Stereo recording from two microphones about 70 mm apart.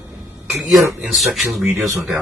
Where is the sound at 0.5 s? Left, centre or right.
Centre.